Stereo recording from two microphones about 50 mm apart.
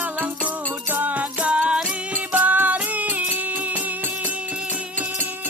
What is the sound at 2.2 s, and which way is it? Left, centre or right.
Music, right.